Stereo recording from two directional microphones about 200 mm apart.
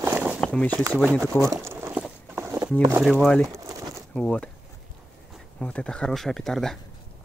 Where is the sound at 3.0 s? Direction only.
Centre (ahead or behind).